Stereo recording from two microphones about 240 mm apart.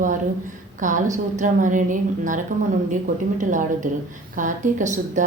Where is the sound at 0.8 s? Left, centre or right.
Right.